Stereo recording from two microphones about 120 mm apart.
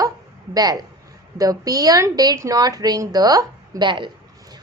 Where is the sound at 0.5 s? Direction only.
30° right (ahead or behind).